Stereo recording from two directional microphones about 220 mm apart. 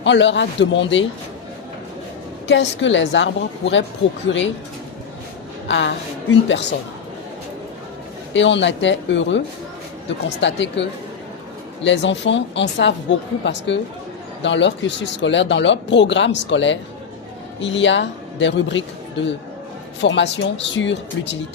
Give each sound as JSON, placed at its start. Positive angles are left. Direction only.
{"t": 0.0, "sound": "speech", "side_deg": 55}
{"t": 2.5, "sound": "speech", "side_deg": 55}
{"t": 5.6, "sound": "a woman's voice", "side_deg": 55}
{"t": 8.3, "sound": "speech", "side_deg": 55}
{"t": 10.4, "sound": "speech", "side_deg": 55}